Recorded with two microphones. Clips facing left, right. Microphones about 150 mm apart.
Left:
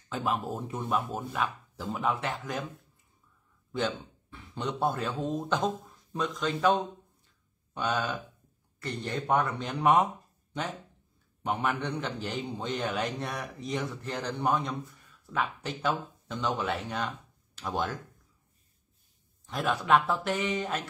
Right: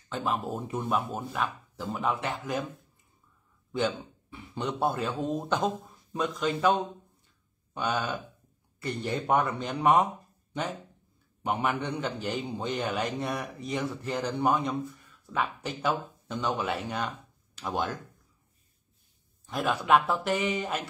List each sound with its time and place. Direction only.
0.1 s a man's voice: centre (ahead or behind)
3.7 s a man's voice: 10° right (ahead or behind)
11.4 s a man's voice: 5° right (ahead or behind)
19.4 s a man's voice: centre (ahead or behind)